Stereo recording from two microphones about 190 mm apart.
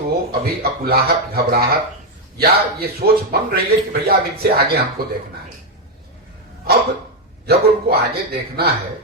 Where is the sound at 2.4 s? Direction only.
55° right (ahead or behind).